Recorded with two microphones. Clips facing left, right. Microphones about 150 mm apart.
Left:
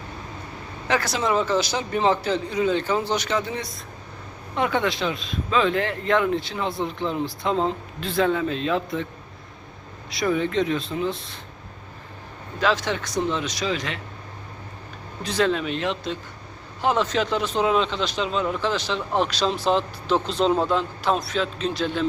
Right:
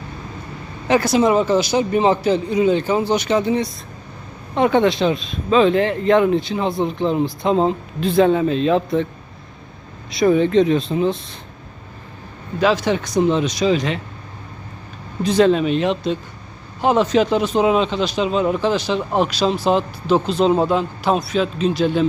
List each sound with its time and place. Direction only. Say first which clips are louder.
0.9 s a man's voice: right 8 dB; 15° right (ahead or behind)
10.1 s speech: right 8 dB; 25° right (ahead or behind)
12.5 s a man's voice: right 6 dB; 10° right (ahead or behind)
15.2 s a man's voice: right 8 dB; 15° right (ahead or behind)